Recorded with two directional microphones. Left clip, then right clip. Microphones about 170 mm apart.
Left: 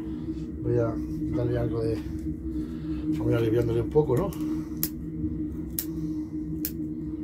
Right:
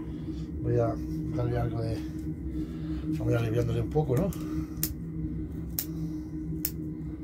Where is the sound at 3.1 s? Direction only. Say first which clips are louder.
Left 5 dB; 25° left (ahead or behind).